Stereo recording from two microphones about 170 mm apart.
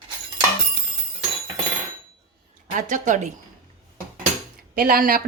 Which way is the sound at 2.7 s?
50° right (ahead or behind).